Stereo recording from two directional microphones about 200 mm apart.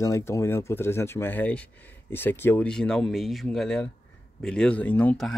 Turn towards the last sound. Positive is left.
turn(degrees=5)  # may be behind; listen again after turning